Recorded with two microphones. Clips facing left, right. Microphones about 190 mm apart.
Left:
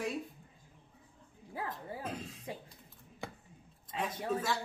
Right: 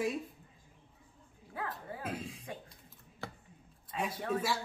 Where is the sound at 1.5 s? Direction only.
25° left (ahead or behind).